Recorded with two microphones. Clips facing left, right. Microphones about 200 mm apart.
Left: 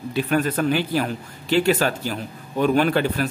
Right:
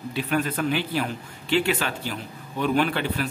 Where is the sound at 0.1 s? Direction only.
45° left (ahead or behind).